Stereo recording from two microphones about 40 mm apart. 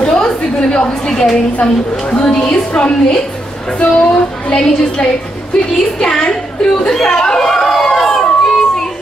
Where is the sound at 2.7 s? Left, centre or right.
Left.